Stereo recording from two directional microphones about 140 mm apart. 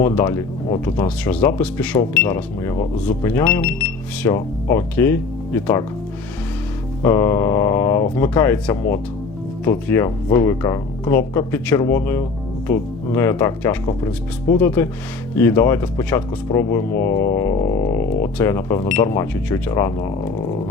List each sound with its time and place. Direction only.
0.0 s speech: 15° left (ahead or behind)
7.0 s a sound: 20° left (ahead or behind)
8.1 s speech: 15° left (ahead or behind)